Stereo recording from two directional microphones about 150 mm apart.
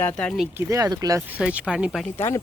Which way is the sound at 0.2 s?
5° left (ahead or behind).